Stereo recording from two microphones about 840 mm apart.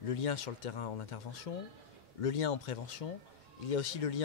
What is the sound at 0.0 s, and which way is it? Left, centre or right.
Speech, left.